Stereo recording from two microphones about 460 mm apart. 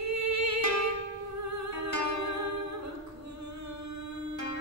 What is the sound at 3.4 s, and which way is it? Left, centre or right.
Singing, right.